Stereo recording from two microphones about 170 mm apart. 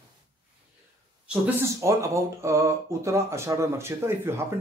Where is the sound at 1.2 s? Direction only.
15° right (ahead or behind).